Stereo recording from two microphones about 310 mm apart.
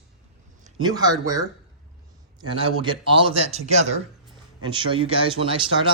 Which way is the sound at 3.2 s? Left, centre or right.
Centre.